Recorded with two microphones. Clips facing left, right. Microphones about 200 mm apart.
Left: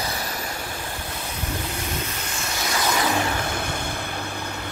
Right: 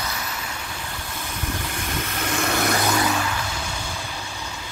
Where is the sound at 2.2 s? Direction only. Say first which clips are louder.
Right 7 dB; 60° right (ahead or behind).